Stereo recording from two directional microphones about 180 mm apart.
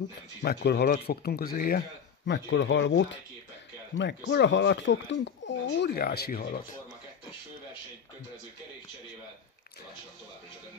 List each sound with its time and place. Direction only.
0.4 s speech: 65° left (ahead or behind)
2.2 s speech: 80° left
4.0 s speech: 75° left (ahead or behind); by 6.6 s 55° left (ahead or behind)